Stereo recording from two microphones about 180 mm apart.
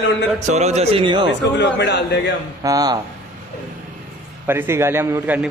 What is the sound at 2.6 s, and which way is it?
Speech, 20° right (ahead or behind).